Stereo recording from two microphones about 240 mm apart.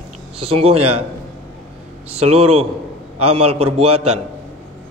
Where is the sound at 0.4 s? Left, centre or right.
Right.